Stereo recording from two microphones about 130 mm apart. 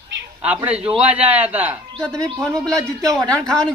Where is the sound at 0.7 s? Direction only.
10° right (ahead or behind).